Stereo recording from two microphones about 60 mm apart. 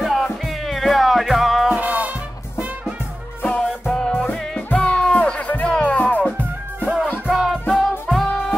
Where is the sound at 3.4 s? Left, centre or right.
Centre.